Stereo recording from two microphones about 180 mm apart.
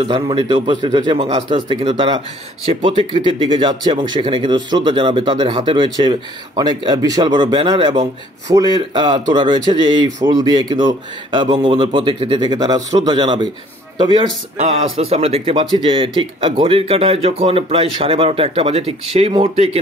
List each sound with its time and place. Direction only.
0.0 s a man's voice: 25° right (ahead or behind)